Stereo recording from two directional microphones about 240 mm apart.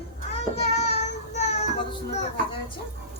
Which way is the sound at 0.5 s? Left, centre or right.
Left.